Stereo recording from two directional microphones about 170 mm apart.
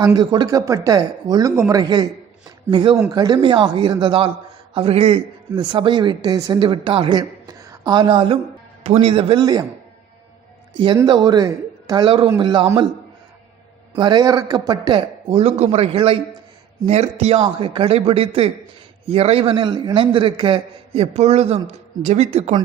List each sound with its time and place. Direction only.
0.0 s a woman's voice: 25° right (ahead or behind)
11.0 s a man's voice: 25° right (ahead or behind)
13.9 s a woman's voice: 25° right (ahead or behind)